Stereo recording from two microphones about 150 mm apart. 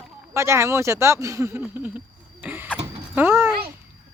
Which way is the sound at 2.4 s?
10° right (ahead or behind).